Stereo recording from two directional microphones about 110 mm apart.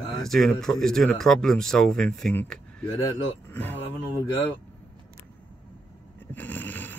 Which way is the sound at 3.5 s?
15° left (ahead or behind).